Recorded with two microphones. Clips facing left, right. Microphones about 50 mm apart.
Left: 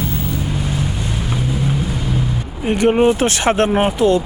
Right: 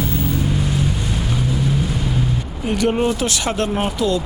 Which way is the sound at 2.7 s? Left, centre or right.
Left.